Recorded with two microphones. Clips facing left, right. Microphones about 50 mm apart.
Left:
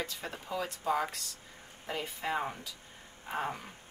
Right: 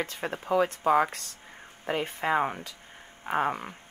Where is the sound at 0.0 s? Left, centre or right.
Right.